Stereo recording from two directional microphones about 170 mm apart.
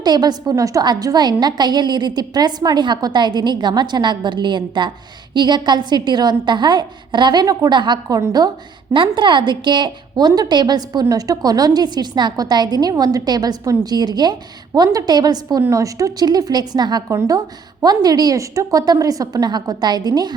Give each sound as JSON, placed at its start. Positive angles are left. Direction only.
{"t": 0.0, "sound": "a woman's voice", "side_deg": -25}